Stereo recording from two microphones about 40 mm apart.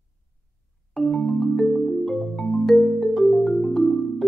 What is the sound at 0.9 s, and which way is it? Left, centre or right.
Music, centre.